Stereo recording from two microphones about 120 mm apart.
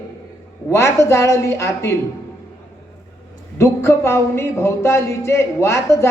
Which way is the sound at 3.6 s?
25° left (ahead or behind).